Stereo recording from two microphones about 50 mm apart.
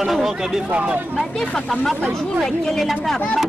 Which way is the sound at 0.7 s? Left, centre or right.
Right.